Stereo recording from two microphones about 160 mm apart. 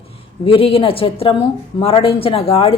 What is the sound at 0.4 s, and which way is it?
A woman's voice, 35° left (ahead or behind).